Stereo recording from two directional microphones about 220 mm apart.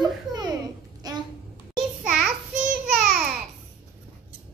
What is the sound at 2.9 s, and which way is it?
Babbling, centre (ahead or behind).